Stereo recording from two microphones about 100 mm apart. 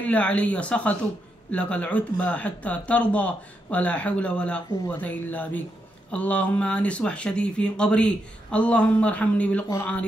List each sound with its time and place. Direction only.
0.0 s speech: 15° left (ahead or behind)